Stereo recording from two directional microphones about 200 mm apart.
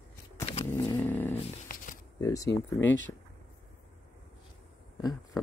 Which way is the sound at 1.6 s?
45° left (ahead or behind).